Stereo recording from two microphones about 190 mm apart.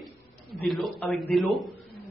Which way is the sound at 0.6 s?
Centre (ahead or behind).